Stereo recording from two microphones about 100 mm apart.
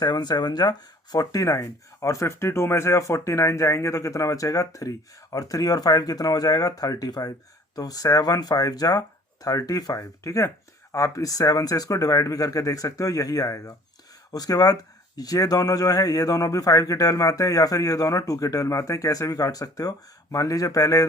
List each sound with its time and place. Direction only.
0.0 s speech: 45° left (ahead or behind)